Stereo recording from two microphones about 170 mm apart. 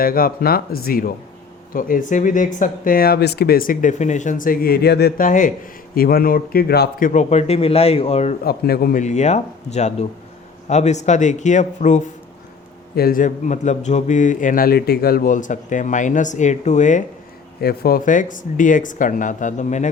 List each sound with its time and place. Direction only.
0.0 s a man's voice: 60° left (ahead or behind)
7.1 s a man's voice: 45° left (ahead or behind)
8.4 s speech: 65° left (ahead or behind); by 12.0 s 45° left (ahead or behind)
13.0 s speech: 55° left (ahead or behind)
17.6 s speech: 65° left (ahead or behind); by 19.9 s 45° left (ahead or behind)